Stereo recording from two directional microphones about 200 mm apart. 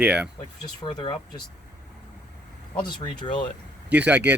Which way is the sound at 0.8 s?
20° left (ahead or behind).